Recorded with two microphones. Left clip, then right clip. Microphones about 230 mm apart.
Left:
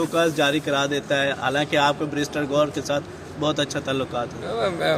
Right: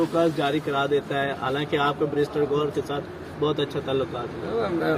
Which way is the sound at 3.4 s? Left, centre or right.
Left.